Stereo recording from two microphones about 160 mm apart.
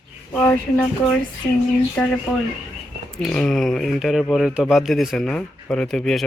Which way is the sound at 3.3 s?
5° left (ahead or behind).